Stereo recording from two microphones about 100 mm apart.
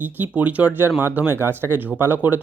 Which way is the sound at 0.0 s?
15° right (ahead or behind).